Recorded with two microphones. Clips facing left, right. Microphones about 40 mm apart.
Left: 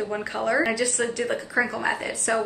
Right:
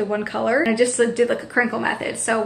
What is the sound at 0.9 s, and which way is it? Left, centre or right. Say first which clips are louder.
A woman's voice: right 7 dB; right.